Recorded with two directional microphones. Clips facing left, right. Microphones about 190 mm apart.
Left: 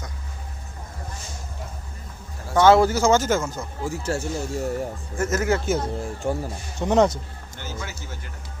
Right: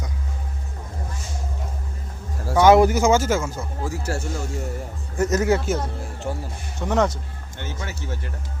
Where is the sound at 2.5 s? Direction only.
15° right (ahead or behind).